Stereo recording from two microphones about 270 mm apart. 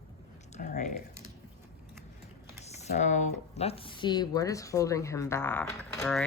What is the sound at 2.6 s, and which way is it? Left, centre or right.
Speech, left.